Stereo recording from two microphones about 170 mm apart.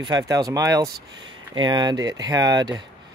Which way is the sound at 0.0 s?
20° right (ahead or behind).